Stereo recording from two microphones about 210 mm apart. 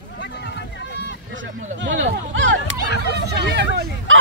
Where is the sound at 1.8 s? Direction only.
60° right (ahead or behind).